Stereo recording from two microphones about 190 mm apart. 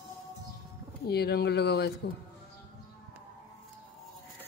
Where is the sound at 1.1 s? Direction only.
60° left (ahead or behind).